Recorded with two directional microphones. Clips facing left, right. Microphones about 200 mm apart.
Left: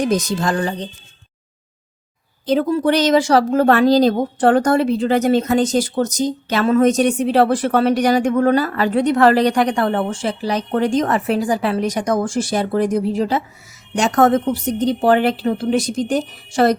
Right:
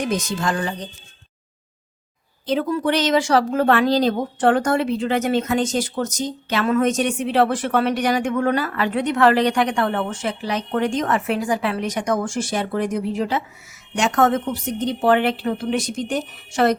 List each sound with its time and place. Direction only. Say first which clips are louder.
0.0 s a woman's voice: left 4 dB; 35° left (ahead or behind)
2.5 s a woman's voice: left 4 dB; 35° left (ahead or behind)